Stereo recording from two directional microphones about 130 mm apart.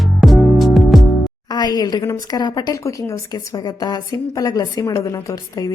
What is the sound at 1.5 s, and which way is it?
Speech, 30° left (ahead or behind).